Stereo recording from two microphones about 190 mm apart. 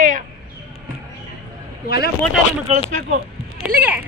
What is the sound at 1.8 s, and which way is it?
Speech, 55° left (ahead or behind).